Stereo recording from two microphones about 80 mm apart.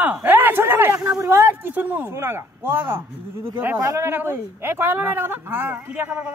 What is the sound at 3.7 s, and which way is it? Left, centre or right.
Speech, right.